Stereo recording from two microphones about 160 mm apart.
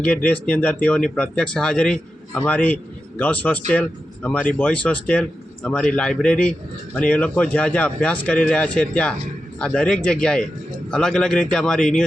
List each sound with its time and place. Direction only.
0.0 s speech: 10° left (ahead or behind)